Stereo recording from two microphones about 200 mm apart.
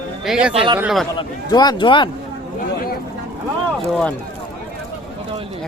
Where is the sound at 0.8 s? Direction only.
Centre (ahead or behind).